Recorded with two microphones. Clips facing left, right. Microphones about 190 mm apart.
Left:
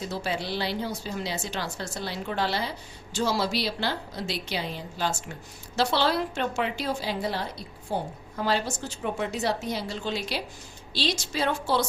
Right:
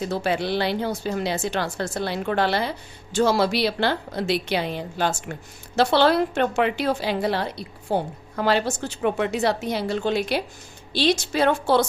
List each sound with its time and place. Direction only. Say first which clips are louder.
0.0 s a woman's voice: right 7 dB; 60° right (ahead or behind)